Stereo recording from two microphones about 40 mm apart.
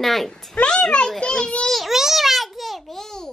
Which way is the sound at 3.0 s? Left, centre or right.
Centre.